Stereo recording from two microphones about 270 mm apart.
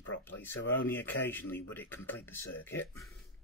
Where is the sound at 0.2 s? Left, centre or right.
Centre.